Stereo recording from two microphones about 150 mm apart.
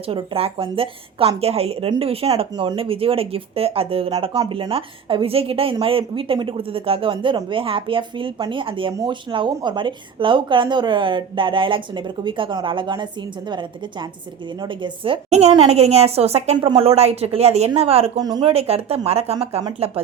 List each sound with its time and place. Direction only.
0.1 s a woman's voice: 40° right (ahead or behind)
15.3 s a woman's voice: 45° right (ahead or behind)
16.6 s a woman's voice: 30° right (ahead or behind)
18.2 s speech: 25° right (ahead or behind)
18.4 s a woman's voice: 40° right (ahead or behind)